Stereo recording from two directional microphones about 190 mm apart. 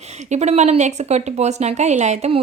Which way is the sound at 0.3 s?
35° right (ahead or behind).